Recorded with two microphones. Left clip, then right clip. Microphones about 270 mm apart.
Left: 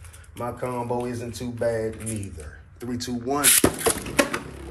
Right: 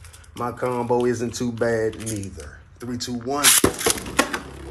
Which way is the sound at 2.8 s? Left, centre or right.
Centre.